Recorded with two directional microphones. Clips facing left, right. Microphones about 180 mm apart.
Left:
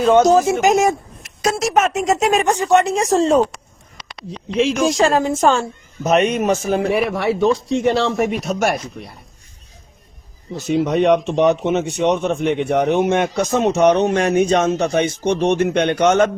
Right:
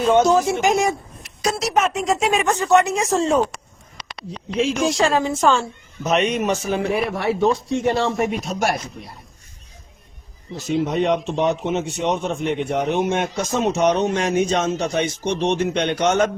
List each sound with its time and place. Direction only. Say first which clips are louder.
0.1 s speech: left 3 dB; 45° left (ahead or behind)
2.5 s speech: even; 15° left (ahead or behind)
2.8 s speech: left 4 dB; 35° left (ahead or behind)
4.8 s speech: left 2 dB; 45° left (ahead or behind)
6.9 s speech: left 3 dB; 90° left; by 8.6 s 65° left (ahead or behind)
10.7 s a man's voice: left 5 dB; 65° left (ahead or behind)